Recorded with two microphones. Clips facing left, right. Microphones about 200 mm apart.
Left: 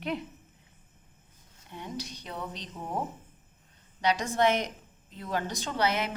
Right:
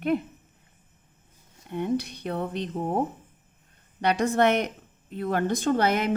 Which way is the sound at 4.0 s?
60° right (ahead or behind).